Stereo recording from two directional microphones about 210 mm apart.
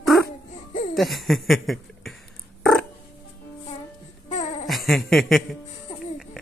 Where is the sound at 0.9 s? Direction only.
Centre (ahead or behind).